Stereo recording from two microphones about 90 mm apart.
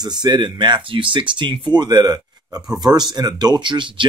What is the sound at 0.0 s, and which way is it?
Speech, 50° right (ahead or behind).